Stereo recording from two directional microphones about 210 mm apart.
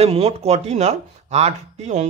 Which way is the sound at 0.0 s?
30° right (ahead or behind).